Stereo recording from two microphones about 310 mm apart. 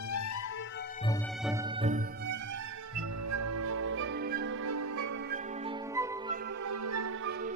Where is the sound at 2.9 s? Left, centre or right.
Right.